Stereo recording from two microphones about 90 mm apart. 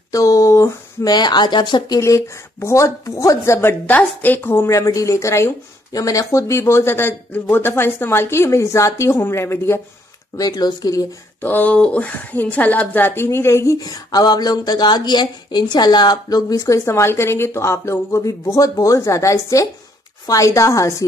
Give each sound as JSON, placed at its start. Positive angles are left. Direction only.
{"t": 0.1, "sound": "speech", "side_deg": 35}
{"t": 1.1, "sound": "speech", "side_deg": 55}
{"t": 2.0, "sound": "speech", "side_deg": 30}
{"t": 3.8, "sound": "speech", "side_deg": 20}
{"t": 10.3, "sound": "speech", "side_deg": 45}
{"t": 11.4, "sound": "speech", "side_deg": 20}